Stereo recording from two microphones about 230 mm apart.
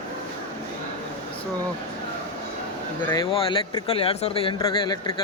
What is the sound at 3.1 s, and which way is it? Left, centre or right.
Speech, centre.